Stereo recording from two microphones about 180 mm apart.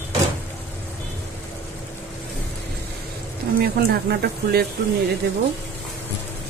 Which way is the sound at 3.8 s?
60° right (ahead or behind).